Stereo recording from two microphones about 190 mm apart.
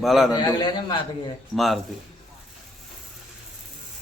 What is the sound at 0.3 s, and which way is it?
Speech, 20° left (ahead or behind).